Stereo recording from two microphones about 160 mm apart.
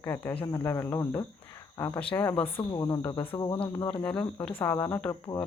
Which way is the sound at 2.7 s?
20° left (ahead or behind).